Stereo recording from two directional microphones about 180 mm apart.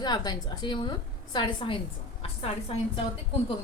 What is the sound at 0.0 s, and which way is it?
A woman's voice, 25° left (ahead or behind).